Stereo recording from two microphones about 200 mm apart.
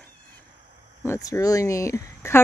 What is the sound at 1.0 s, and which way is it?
Speech, 15° left (ahead or behind).